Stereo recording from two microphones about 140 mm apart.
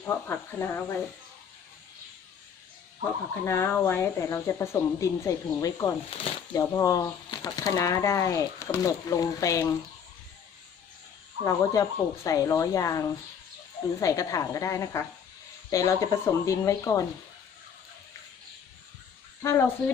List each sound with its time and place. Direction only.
0.1 s speech: 15° left (ahead or behind)
3.0 s speech: 20° left (ahead or behind)
6.1 s speech: 45° left (ahead or behind)
6.5 s speech: 25° left (ahead or behind)
11.4 s speech: 25° left (ahead or behind)
14.0 s speech: 25° left (ahead or behind)
19.4 s speech: 20° left (ahead or behind)